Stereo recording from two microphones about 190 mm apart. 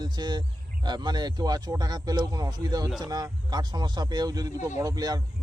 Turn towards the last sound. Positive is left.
turn(degrees=-20)  # may be behind; listen again after turning